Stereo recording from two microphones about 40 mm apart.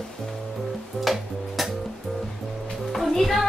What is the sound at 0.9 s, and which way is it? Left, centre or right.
Music, centre.